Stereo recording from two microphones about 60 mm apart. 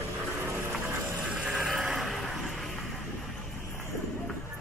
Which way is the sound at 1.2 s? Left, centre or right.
Centre.